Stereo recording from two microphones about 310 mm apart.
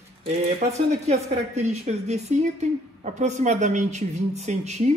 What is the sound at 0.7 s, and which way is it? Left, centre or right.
A woman's voice, right.